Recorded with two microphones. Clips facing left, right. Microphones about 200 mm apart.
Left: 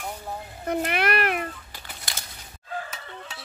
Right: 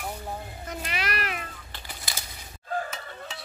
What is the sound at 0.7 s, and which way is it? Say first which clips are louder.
Cat: left 9 dB; 60° left (ahead or behind).